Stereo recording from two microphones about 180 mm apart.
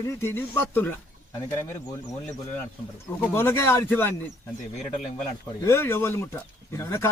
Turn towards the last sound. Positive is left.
turn(degrees=15)  # may be behind; listen again after turning